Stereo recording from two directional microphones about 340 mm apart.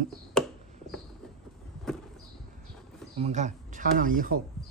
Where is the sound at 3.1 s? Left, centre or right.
Centre.